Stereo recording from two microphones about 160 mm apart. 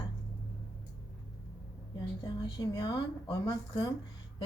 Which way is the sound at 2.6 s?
20° left (ahead or behind).